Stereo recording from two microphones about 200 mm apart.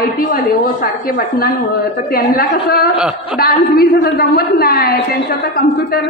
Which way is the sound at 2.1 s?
50° left (ahead or behind).